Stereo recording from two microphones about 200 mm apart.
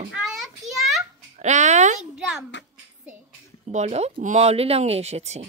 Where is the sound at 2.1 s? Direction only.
Centre (ahead or behind).